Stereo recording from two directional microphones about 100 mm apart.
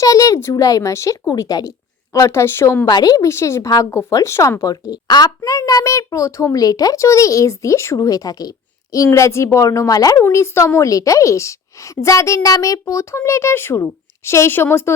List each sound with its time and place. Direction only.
0.0 s a sound: 35° left (ahead or behind)
0.5 s a woman's voice: 35° left (ahead or behind)
2.1 s a woman's voice: 25° left (ahead or behind)
2.8 s a woman's voice: 40° left (ahead or behind)
10.2 s a woman's voice: 25° left (ahead or behind)